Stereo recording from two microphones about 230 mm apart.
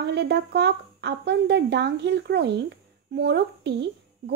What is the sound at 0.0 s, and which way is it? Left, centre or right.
A woman's voice, right.